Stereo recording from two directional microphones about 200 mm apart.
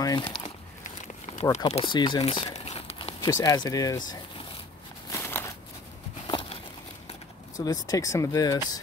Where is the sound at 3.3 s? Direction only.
15° left (ahead or behind).